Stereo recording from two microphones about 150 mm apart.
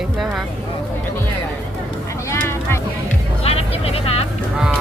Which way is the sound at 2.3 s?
15° left (ahead or behind).